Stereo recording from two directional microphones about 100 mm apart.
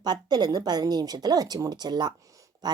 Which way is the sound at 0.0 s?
45° right (ahead or behind).